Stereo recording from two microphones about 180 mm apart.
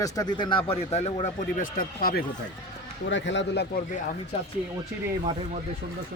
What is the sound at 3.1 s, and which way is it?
Speech, 85° left.